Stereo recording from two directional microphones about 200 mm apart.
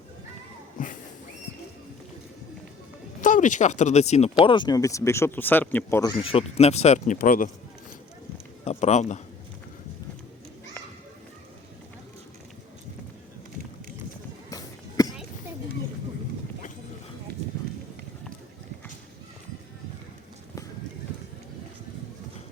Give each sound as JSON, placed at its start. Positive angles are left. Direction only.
{"t": 0.8, "sound": "a sound", "side_deg": 40}
{"t": 3.2, "sound": "speech", "side_deg": 40}
{"t": 6.1, "sound": "speech", "side_deg": 30}
{"t": 8.6, "sound": "speech", "side_deg": 35}
{"t": 14.5, "sound": "music", "side_deg": 20}